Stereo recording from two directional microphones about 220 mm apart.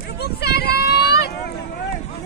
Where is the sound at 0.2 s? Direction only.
45° left (ahead or behind).